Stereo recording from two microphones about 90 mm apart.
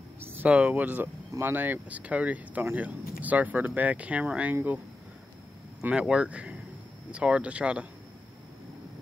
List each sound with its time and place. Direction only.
0.2 s a sound: 25° right (ahead or behind)
0.5 s speech: 10° right (ahead or behind)
5.8 s speech: 15° right (ahead or behind)